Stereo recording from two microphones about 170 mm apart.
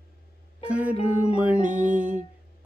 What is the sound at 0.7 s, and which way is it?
Music, 10° right (ahead or behind).